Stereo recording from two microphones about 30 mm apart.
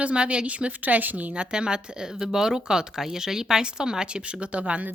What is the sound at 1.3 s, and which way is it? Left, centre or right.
Speech, right.